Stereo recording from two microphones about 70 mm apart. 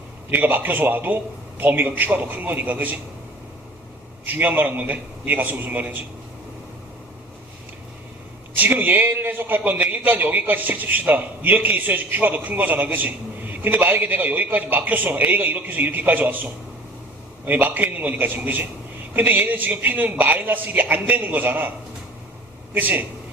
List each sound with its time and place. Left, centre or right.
0.3 s a man's voice: right
4.3 s a man's voice: right
8.5 s a man's voice: right
22.7 s a man's voice: right